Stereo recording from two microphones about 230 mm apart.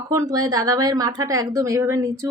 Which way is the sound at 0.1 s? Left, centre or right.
Centre.